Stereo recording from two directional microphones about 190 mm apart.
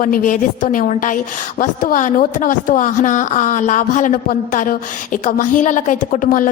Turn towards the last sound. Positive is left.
turn(degrees=45)  # may be behind; listen again after turning